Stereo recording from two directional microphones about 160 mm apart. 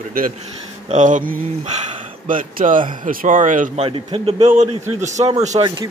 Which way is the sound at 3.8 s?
35° right (ahead or behind).